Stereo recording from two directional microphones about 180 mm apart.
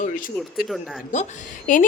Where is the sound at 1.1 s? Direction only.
45° left (ahead or behind).